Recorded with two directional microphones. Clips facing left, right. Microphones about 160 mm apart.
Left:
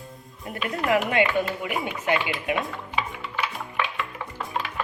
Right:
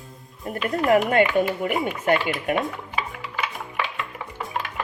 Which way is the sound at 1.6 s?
45° right (ahead or behind).